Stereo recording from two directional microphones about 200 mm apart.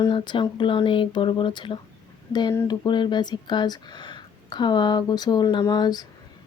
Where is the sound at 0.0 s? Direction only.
25° left (ahead or behind).